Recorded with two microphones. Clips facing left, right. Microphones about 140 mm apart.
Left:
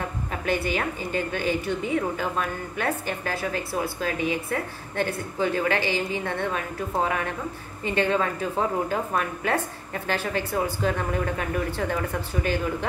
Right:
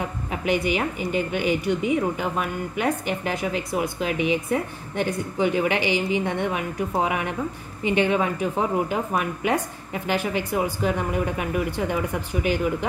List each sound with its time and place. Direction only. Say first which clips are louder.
0.3 s a woman's voice: right 3 dB; 15° right (ahead or behind)